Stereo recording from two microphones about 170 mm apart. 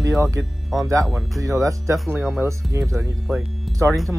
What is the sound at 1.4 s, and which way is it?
Speech, 20° right (ahead or behind).